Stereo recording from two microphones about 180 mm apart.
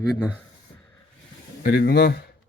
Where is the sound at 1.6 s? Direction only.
60° left (ahead or behind).